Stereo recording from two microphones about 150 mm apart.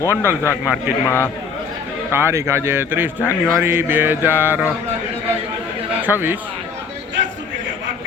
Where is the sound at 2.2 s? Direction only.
15° right (ahead or behind).